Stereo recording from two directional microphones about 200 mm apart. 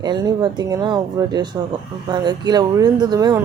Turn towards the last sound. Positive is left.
turn(degrees=-20)  # may be behind; listen again after turning